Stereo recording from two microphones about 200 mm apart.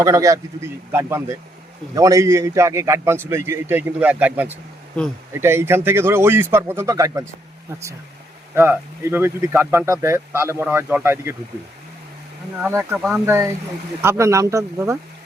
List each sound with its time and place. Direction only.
0.0 s speech: 15° right (ahead or behind)
8.5 s speech: 10° right (ahead or behind)
12.6 s speech: 10° right (ahead or behind)